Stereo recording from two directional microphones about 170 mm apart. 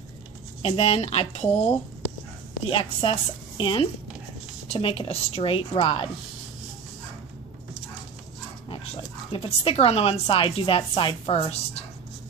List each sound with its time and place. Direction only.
0.6 s a woman's voice: 35° left (ahead or behind)
2.7 s a woman's voice: 30° left (ahead or behind)
8.6 s speech: 30° left (ahead or behind)